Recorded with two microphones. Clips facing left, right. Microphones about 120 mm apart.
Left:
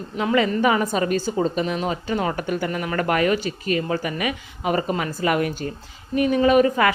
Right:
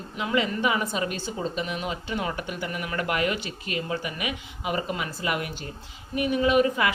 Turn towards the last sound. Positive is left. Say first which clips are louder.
# left 5 dB
turn(degrees=45)  # may be behind; listen again after turning